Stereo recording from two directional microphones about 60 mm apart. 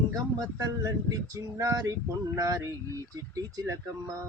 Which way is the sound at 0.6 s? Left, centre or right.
Right.